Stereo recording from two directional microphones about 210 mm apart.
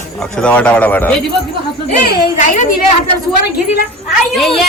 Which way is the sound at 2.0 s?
45° left (ahead or behind).